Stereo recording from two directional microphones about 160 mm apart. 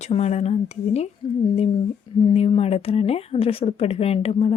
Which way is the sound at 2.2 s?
35° left (ahead or behind).